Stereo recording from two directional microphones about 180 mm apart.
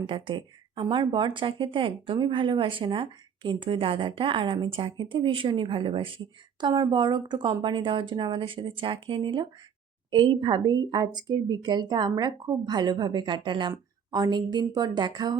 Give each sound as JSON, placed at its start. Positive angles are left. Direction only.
{"t": 0.0, "sound": "speech", "side_deg": -25}